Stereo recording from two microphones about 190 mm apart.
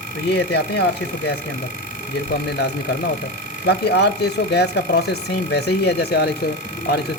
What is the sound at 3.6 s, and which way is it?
Speech, 60° left (ahead or behind).